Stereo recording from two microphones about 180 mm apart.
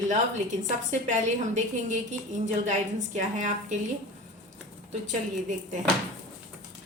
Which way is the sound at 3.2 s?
45° right (ahead or behind).